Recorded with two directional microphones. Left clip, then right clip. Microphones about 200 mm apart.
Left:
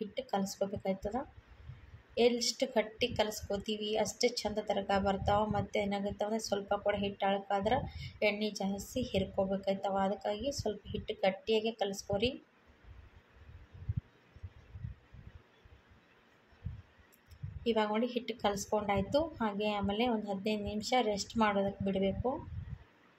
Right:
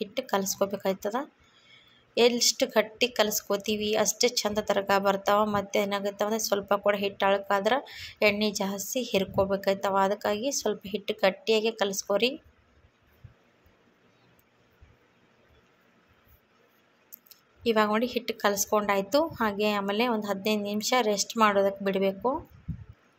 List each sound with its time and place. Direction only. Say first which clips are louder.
0.0 s a woman's voice: right 7 dB; 15° right (ahead or behind)
17.6 s a woman's voice: right 7 dB; 15° right (ahead or behind)